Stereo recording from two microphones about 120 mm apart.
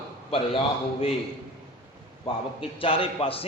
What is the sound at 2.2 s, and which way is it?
A man's voice, 50° left (ahead or behind).